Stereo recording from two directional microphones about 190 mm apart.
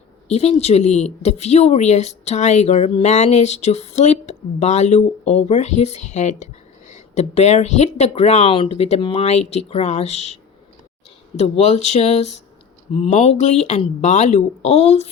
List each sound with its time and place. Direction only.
0.3 s speech: 35° left (ahead or behind)
11.3 s speech: 35° left (ahead or behind)